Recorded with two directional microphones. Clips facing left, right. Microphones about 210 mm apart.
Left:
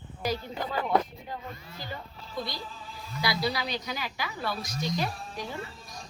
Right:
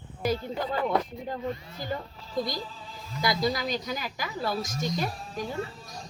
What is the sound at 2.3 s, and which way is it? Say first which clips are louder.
A woman's voice: right 5 dB; 45° right (ahead or behind).